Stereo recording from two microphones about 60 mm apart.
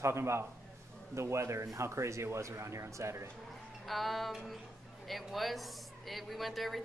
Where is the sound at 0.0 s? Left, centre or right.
Right.